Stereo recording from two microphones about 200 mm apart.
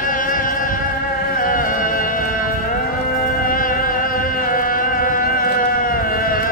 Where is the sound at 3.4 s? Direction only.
45° left (ahead or behind).